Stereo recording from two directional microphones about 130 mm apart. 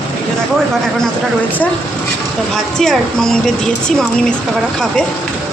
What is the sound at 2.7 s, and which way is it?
A woman's voice, 5° left (ahead or behind).